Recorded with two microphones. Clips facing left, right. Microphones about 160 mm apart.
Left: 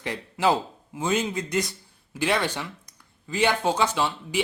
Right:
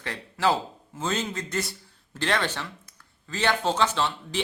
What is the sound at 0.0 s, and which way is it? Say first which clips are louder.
Speech: left 2 dB; 15° left (ahead or behind).